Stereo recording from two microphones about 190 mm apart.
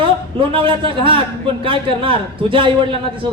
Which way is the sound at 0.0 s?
25° right (ahead or behind).